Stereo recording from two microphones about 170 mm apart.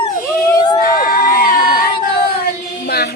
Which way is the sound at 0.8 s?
55° left (ahead or behind).